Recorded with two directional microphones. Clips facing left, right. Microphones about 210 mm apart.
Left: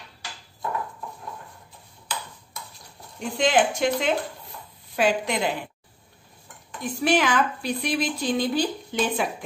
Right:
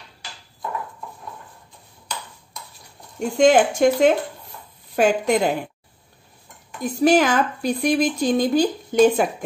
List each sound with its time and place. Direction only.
3.2 s a woman's voice: 45° right (ahead or behind)
6.8 s a woman's voice: 40° right (ahead or behind)